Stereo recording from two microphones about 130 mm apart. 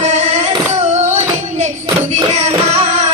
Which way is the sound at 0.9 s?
60° right (ahead or behind).